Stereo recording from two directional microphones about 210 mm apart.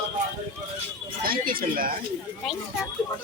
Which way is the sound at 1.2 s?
45° right (ahead or behind).